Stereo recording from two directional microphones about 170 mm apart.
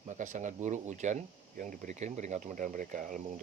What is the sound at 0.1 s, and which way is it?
Speech, 45° right (ahead or behind).